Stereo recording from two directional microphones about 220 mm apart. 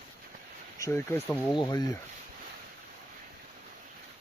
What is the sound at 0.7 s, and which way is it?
Speech, 15° left (ahead or behind).